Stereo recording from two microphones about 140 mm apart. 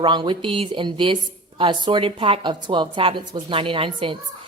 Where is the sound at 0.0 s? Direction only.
35° right (ahead or behind).